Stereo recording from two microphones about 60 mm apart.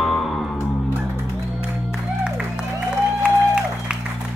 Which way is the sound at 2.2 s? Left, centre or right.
Centre.